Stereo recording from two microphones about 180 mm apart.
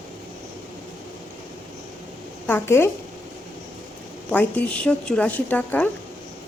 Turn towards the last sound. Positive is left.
turn(degrees=10)  # may be behind; listen again after turning